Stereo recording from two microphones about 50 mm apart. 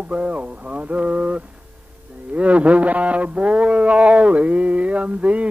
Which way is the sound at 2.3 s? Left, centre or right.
Right.